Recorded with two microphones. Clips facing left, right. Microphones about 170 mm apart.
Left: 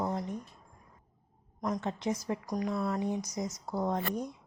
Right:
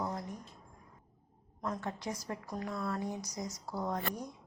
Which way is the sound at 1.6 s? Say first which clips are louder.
Left 5 dB; 20° left (ahead or behind).